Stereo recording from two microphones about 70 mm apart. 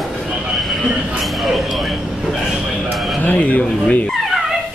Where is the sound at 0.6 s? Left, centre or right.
Centre.